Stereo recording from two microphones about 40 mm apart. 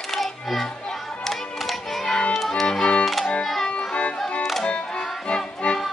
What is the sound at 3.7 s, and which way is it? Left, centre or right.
Music, left.